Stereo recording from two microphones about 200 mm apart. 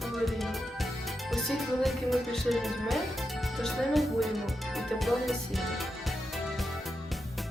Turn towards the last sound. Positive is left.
turn(degrees=0)  # may be behind; listen again after turning